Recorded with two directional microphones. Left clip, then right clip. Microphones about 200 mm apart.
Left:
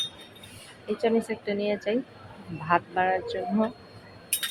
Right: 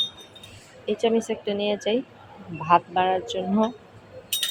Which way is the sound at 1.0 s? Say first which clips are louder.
Right 2 dB; 5° right (ahead or behind).